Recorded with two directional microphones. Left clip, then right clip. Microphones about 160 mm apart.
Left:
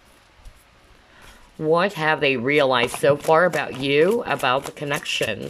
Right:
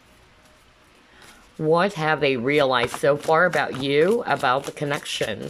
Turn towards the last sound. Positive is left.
turn(degrees=0)  # may be behind; listen again after turning